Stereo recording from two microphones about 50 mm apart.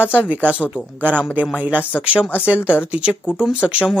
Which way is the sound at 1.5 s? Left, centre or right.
Right.